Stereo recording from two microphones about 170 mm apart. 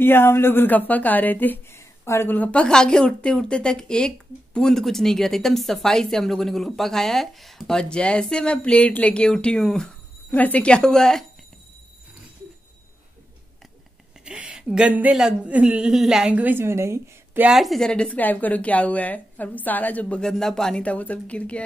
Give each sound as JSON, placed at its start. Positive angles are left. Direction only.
{"t": 0.0, "sound": "speech", "side_deg": 15}
{"t": 14.2, "sound": "speech", "side_deg": -5}